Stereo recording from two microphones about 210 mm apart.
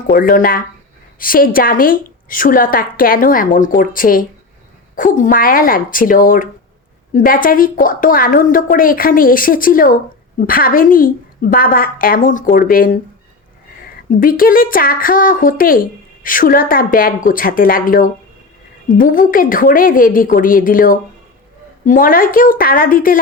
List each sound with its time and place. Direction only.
0.1 s a woman's voice: 40° left (ahead or behind)
14.2 s a woman's voice: 40° left (ahead or behind)